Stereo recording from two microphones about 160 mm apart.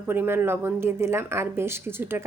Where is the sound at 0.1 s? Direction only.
15° right (ahead or behind).